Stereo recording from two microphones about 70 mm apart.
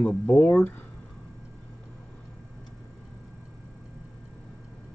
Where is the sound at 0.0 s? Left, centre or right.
Left.